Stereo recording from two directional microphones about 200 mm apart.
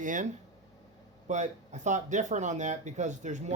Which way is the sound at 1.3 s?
35° right (ahead or behind).